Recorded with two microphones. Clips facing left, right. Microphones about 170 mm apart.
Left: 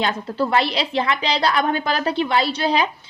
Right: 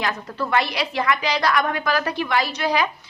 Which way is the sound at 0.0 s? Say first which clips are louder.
Left 4 dB; 30° left (ahead or behind).